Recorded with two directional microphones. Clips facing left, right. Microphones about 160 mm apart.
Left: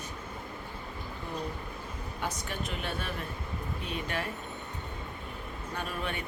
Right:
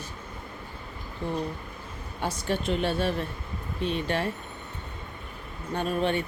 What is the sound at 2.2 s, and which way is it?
Speech, 30° right (ahead or behind).